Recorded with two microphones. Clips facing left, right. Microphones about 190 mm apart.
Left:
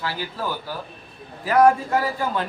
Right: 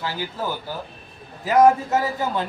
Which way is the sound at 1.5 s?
20° right (ahead or behind).